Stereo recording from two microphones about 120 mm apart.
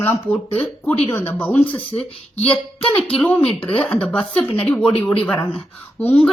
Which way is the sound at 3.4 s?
55° left (ahead or behind).